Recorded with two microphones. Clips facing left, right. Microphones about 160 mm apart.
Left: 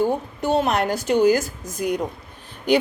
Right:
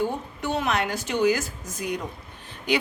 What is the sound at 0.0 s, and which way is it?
A woman's voice, 35° left (ahead or behind).